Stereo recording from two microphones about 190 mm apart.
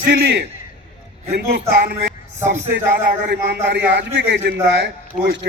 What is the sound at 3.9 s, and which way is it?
A man's voice, 65° right (ahead or behind).